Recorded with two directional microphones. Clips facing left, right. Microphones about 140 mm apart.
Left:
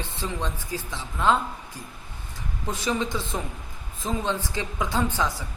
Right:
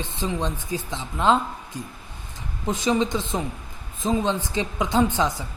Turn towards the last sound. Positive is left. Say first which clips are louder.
# right 5 dB
turn(degrees=-20)  # may be behind; listen again after turning